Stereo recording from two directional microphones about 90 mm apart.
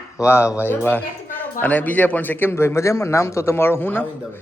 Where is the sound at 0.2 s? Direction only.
30° left (ahead or behind).